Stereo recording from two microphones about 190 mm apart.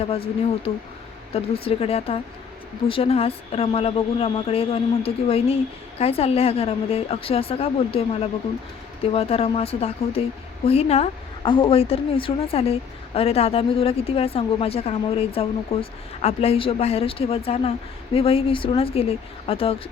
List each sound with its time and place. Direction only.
0.0 s speech: 30° left (ahead or behind)